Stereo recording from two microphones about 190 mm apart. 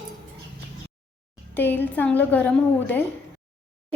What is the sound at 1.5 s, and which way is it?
A woman's voice, 10° left (ahead or behind).